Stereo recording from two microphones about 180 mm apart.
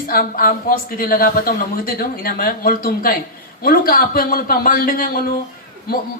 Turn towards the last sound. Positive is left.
turn(degrees=55)  # may be behind; listen again after turning